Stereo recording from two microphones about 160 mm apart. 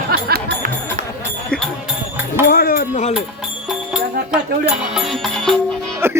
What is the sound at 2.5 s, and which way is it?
Music, 80° left.